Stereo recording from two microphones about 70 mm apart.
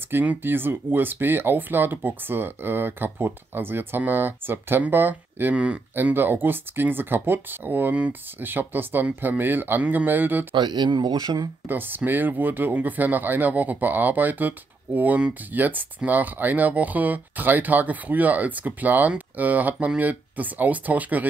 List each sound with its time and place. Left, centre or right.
0.1 s speech: right
5.9 s speech: right
10.5 s speech: right
11.6 s speech: right